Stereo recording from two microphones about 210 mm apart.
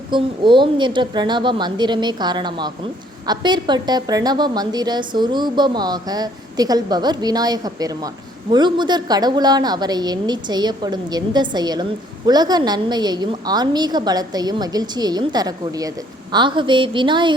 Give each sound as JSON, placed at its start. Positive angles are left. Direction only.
{"t": 0.1, "sound": "a woman's voice", "side_deg": -25}